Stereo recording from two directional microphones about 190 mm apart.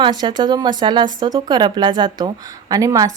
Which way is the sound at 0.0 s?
25° right (ahead or behind).